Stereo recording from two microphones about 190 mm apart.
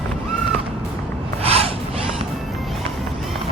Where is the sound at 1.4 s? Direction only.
30° right (ahead or behind).